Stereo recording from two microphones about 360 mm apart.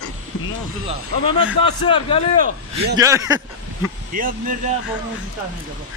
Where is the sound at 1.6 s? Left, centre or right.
Centre.